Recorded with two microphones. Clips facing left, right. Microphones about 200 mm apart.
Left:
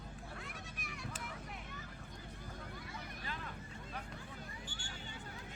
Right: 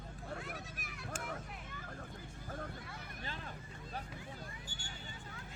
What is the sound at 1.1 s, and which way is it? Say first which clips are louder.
Vehicle: right 5 dB; 50° right (ahead or behind).